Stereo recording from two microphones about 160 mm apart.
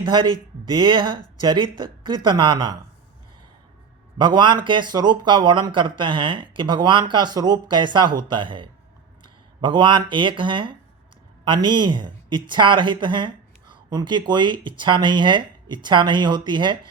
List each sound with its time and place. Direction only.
0.0 s speech: 30° right (ahead or behind)
4.2 s speech: 30° right (ahead or behind)